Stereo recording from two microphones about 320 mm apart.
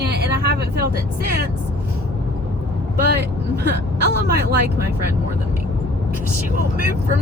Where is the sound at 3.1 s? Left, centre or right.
Right.